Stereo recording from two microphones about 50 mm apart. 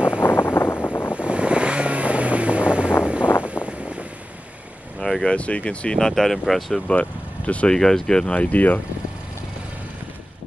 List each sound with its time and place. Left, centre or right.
0.2 s a sound: left
1.1 s vehicle: right
3.0 s wind noise: right
3.6 s vehicle: left
5.0 s vehicle: centre
5.3 s speech: left
5.9 s speech: centre
6.9 s speech: left
7.7 s speech: centre
8.4 s speech: left